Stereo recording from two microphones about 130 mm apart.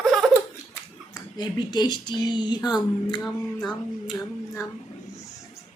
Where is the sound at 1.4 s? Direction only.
35° left (ahead or behind).